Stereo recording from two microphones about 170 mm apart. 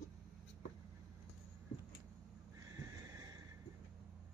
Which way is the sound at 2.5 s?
20° right (ahead or behind).